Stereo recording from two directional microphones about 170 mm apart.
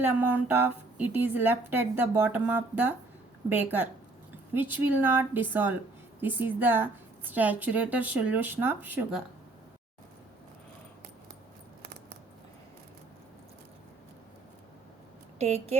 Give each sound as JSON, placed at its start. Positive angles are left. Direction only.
{"t": 0.0, "sound": "a woman's voice", "side_deg": -10}
{"t": 15.4, "sound": "speech", "side_deg": -40}